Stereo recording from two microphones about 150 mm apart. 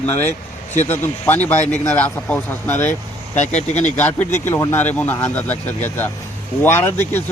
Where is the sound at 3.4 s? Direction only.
50° left (ahead or behind).